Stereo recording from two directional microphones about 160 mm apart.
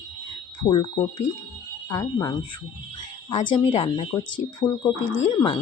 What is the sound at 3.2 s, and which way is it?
Speech, 30° left (ahead or behind).